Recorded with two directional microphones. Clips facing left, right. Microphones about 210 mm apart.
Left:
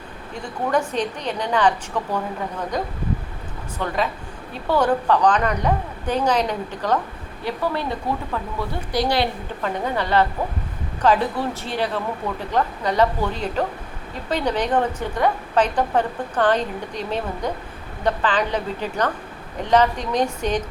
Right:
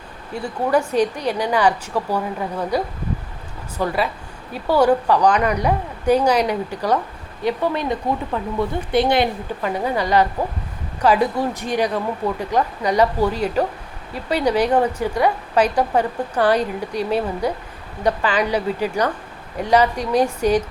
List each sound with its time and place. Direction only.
0.3 s a woman's voice: 10° right (ahead or behind)